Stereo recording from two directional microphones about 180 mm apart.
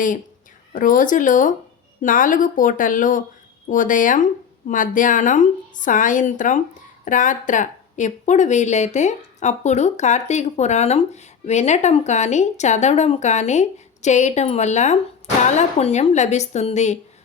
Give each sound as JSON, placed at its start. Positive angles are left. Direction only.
{"t": 0.7, "sound": "a woman's voice", "side_deg": 50}